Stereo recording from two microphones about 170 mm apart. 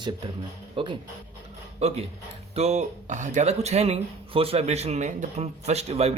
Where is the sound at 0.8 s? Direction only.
30° right (ahead or behind).